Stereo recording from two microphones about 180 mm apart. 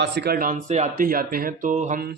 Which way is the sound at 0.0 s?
65° right (ahead or behind).